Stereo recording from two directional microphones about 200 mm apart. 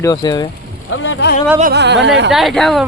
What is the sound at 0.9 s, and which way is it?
Vehicle, 70° left (ahead or behind).